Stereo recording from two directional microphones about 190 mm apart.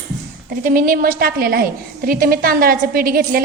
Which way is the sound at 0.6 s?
45° right (ahead or behind).